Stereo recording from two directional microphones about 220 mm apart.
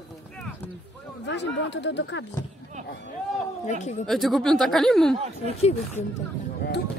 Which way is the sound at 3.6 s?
30° left (ahead or behind).